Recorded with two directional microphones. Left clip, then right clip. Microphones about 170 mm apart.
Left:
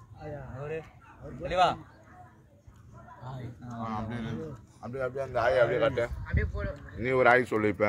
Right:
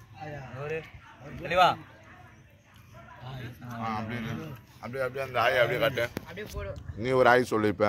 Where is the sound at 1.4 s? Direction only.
25° right (ahead or behind).